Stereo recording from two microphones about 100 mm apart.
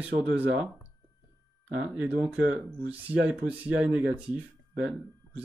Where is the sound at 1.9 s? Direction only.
10° right (ahead or behind).